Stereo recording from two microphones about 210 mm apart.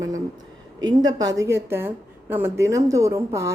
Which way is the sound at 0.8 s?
20° right (ahead or behind).